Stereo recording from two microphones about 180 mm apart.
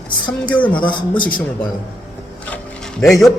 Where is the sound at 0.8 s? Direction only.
25° left (ahead or behind).